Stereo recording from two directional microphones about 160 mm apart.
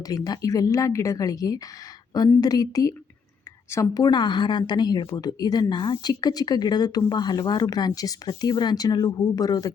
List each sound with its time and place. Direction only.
0.0 s a woman's voice: 20° left (ahead or behind)